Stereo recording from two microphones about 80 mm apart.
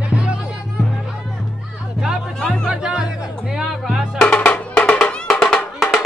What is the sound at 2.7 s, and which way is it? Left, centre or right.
Music, centre.